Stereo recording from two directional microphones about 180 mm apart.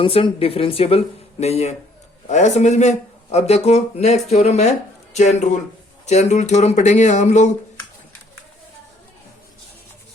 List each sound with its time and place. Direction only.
0.0 s speech: 30° left (ahead or behind)